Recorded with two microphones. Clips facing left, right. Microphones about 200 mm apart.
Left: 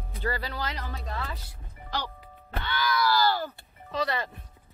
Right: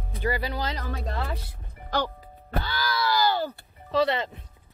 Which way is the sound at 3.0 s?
20° right (ahead or behind).